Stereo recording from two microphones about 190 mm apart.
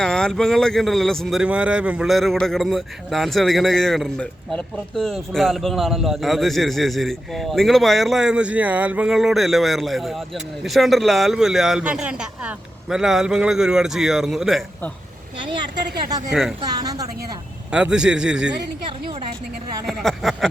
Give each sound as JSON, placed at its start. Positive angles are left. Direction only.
{"t": 0.0, "sound": "speech", "side_deg": 5}
{"t": 16.3, "sound": "speech", "side_deg": 0}
{"t": 16.6, "sound": "speech", "side_deg": -20}
{"t": 17.7, "sound": "speech", "side_deg": -5}
{"t": 19.8, "sound": "speech", "side_deg": 0}